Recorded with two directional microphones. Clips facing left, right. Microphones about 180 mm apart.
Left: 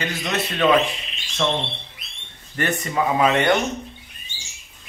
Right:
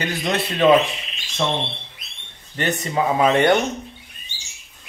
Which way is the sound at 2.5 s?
20° right (ahead or behind).